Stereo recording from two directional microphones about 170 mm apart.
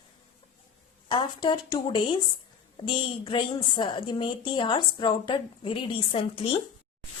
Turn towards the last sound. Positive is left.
turn(degrees=35)  # may be behind; listen again after turning